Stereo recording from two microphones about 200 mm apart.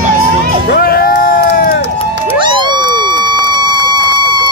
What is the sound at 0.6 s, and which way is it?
Crowd, 50° left (ahead or behind).